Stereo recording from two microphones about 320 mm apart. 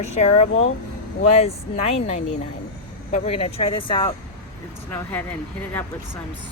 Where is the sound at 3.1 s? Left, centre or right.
Centre.